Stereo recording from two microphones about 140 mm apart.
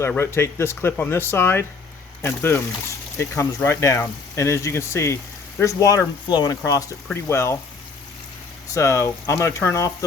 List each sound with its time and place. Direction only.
0.2 s speech: 20° left (ahead or behind)
8.7 s speech: 20° left (ahead or behind)